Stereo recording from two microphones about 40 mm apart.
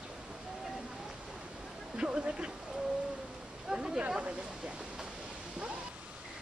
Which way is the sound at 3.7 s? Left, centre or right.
Right.